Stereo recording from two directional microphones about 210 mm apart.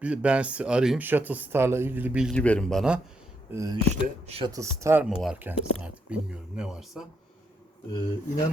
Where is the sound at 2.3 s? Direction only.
5° left (ahead or behind).